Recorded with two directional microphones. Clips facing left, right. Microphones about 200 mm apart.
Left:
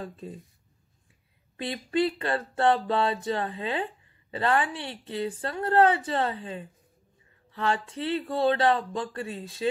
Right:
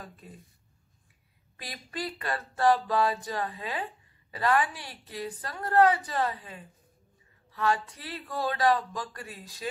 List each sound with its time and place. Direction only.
0.0 s a woman's voice: 25° left (ahead or behind)
1.6 s a woman's voice: 30° left (ahead or behind)